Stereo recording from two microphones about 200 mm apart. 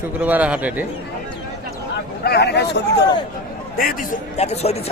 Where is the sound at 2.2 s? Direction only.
55° left (ahead or behind).